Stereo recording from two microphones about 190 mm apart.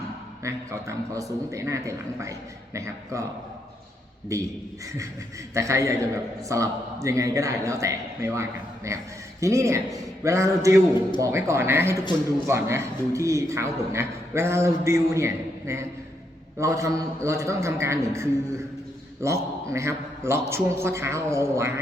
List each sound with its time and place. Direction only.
0.4 s a man's voice: 15° right (ahead or behind)
4.3 s a man's voice: 15° right (ahead or behind)
5.5 s a man's voice: 15° right (ahead or behind)